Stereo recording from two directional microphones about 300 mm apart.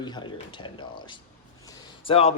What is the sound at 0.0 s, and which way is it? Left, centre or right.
Speech, centre.